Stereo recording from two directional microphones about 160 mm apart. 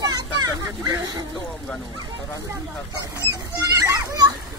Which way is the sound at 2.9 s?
25° right (ahead or behind).